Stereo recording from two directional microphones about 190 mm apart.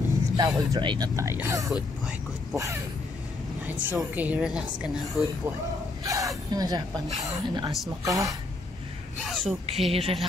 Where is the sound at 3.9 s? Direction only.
10° right (ahead or behind).